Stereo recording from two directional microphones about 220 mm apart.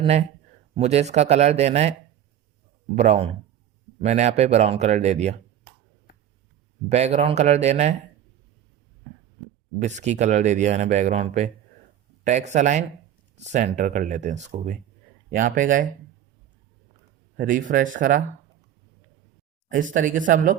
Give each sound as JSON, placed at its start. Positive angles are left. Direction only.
{"t": 0.0, "sound": "speech", "side_deg": -30}
{"t": 6.8, "sound": "speech", "side_deg": -30}
{"t": 9.7, "sound": "speech", "side_deg": -30}
{"t": 17.3, "sound": "speech", "side_deg": -40}
{"t": 19.6, "sound": "speech", "side_deg": -35}